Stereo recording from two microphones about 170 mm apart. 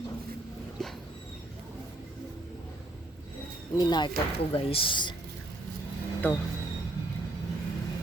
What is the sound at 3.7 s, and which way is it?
Speech, 25° left (ahead or behind).